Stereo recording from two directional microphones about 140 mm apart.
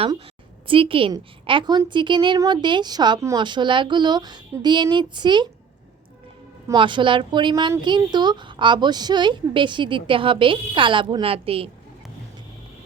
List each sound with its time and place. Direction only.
0.7 s a woman's voice: 40° right (ahead or behind)
6.7 s a woman's voice: 35° right (ahead or behind)